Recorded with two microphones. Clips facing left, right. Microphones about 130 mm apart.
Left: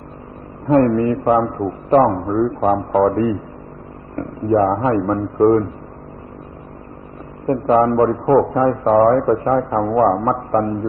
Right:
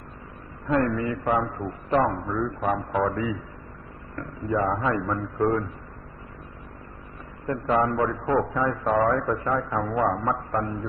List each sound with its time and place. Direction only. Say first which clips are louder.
0.7 s a man's voice: left 10 dB; 40° left (ahead or behind)
7.4 s a man's voice: left 9 dB; 40° left (ahead or behind)